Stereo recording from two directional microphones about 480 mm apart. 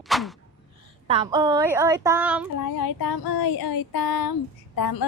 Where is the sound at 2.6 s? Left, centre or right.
Left.